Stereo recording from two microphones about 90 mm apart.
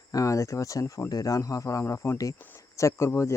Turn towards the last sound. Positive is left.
turn(degrees=30)  # may be behind; listen again after turning